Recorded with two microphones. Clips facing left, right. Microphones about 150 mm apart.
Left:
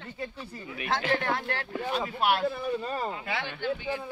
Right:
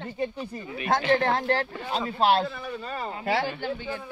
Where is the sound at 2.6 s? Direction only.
35° left (ahead or behind).